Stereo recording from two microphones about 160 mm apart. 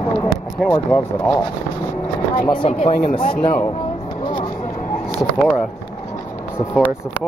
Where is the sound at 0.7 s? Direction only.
15° left (ahead or behind).